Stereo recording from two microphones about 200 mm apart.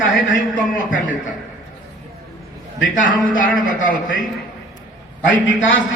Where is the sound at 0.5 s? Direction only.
40° left (ahead or behind).